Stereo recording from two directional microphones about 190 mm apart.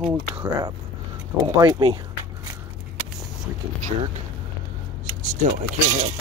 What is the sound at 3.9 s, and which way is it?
Speech, 35° right (ahead or behind).